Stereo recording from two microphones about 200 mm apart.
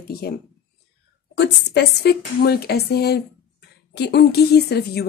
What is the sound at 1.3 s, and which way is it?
A woman's voice, 55° left (ahead or behind).